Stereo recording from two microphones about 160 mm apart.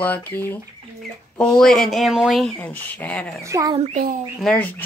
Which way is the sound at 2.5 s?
10° left (ahead or behind).